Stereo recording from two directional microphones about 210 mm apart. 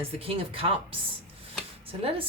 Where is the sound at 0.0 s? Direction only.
25° right (ahead or behind).